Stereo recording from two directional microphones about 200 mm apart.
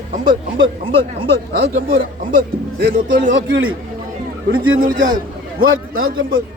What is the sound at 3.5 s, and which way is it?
Speech, 90° right.